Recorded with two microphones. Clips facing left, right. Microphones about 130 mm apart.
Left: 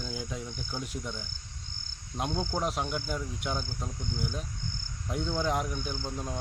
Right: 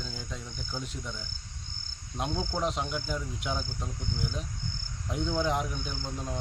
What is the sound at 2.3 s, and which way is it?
Speech, 15° left (ahead or behind).